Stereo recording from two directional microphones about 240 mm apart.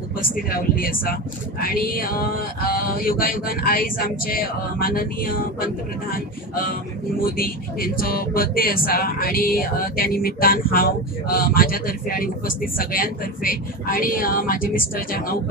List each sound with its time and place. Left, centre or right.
0.2 s speech: left